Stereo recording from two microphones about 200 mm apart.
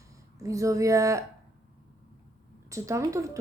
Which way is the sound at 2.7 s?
15° right (ahead or behind).